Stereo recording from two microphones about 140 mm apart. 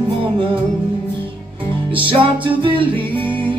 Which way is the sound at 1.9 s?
40° right (ahead or behind).